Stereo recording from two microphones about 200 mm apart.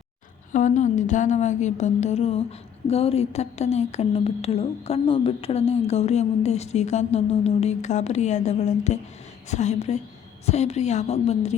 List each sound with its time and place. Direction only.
0.5 s a woman's voice: 40° left (ahead or behind)